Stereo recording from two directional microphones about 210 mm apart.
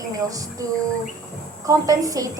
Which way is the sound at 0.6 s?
15° right (ahead or behind).